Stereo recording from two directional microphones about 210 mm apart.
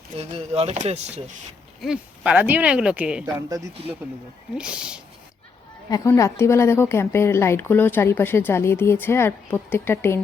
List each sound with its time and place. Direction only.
0.2 s speech: 30° right (ahead or behind)
1.8 s speech: 5° right (ahead or behind)
3.2 s speech: 15° right (ahead or behind)
5.9 s a woman's voice: 15° left (ahead or behind)